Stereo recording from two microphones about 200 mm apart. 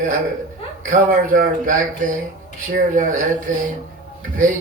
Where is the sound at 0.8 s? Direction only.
40° right (ahead or behind).